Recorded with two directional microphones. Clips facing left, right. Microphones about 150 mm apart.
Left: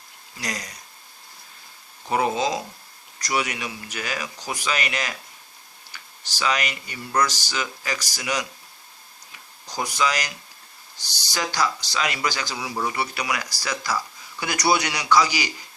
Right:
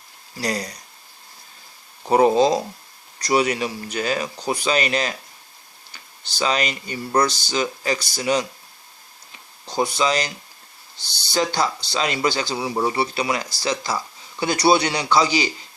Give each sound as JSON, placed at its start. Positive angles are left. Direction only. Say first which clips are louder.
{"t": 0.3, "sound": "speech", "louder": "right 7 dB", "side_deg": -35}
{"t": 2.0, "sound": "speech", "louder": "right 7 dB", "side_deg": -35}
{"t": 9.6, "sound": "speech", "louder": "right 4 dB", "side_deg": -25}